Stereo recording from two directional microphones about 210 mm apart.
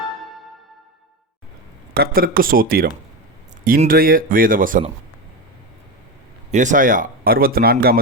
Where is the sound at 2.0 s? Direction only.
45° right (ahead or behind).